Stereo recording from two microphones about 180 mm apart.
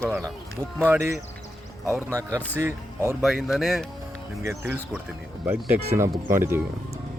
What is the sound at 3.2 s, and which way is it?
Speech, centre (ahead or behind).